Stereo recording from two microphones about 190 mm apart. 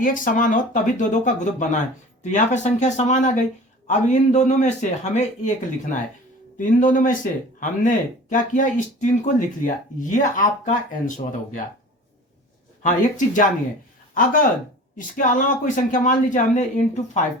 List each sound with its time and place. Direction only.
0.0 s speech: 45° left (ahead or behind)
6.6 s speech: 40° left (ahead or behind)
12.8 s speech: 40° left (ahead or behind)